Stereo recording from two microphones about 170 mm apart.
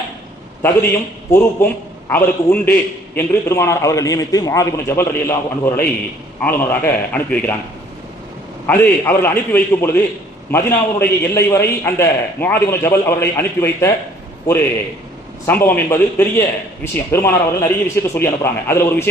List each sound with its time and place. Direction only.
1.3 s a man's voice: 15° left (ahead or behind)
8.6 s a man's voice: 10° left (ahead or behind)